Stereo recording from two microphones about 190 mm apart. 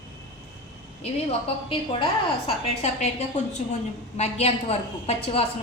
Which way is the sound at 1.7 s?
30° left (ahead or behind).